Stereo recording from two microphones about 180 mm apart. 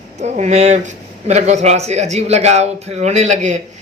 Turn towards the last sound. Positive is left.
turn(degrees=-40)  # may be behind; listen again after turning